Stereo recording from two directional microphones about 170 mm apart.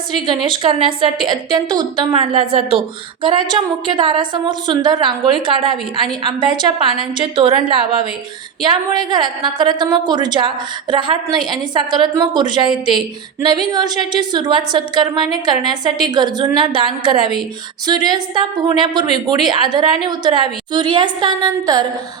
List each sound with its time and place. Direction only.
0.3 s a woman's voice: 25° right (ahead or behind)